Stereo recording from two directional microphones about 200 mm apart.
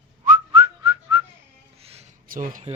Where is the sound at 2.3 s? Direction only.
40° right (ahead or behind).